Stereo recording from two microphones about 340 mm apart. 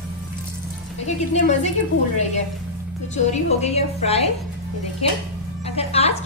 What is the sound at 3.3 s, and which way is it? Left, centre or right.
Speech, centre.